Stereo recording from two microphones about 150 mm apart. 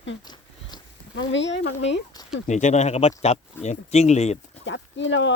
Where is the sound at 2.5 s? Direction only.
50° left (ahead or behind).